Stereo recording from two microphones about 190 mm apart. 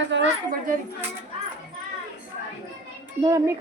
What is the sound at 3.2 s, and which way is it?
Speech, 20° right (ahead or behind).